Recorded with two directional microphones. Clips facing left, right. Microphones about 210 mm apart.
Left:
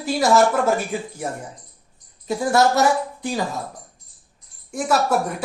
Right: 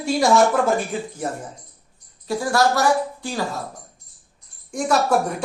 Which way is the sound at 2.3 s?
20° left (ahead or behind).